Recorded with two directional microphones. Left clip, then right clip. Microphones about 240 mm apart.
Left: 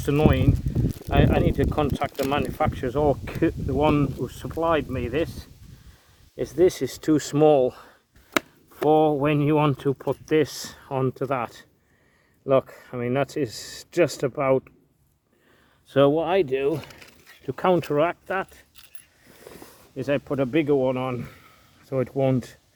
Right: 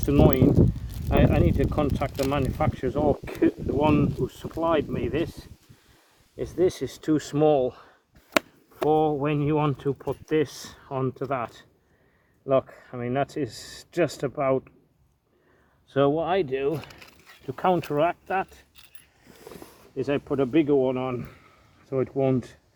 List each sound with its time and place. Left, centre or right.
0.0 s speech: left
15.9 s speech: left
16.9 s a sound: centre
17.4 s speech: left